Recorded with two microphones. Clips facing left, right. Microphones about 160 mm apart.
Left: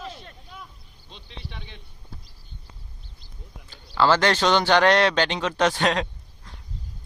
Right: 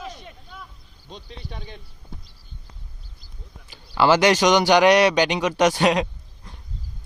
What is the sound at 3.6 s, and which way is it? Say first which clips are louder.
A man's voice: right 2 dB; 15° right (ahead or behind).